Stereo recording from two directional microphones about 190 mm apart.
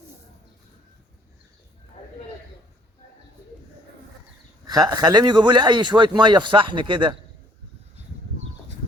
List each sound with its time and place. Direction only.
4.9 s speech: 20° right (ahead or behind)